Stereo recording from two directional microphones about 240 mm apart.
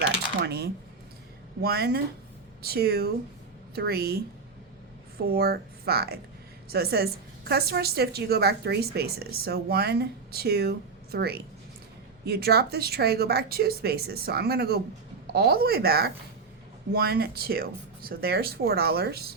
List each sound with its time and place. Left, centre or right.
0.0 s a woman's voice: right